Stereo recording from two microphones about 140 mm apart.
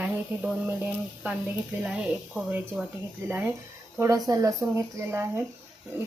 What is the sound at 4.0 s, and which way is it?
Speech, 25° right (ahead or behind).